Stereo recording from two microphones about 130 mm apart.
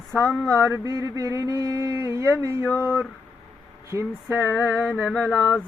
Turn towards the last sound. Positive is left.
turn(degrees=10)  # may be behind; listen again after turning